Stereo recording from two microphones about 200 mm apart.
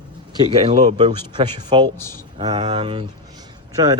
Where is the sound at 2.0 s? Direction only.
10° left (ahead or behind).